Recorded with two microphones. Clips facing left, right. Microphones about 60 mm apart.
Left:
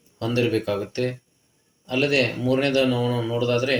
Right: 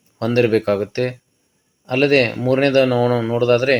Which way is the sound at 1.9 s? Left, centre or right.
Right.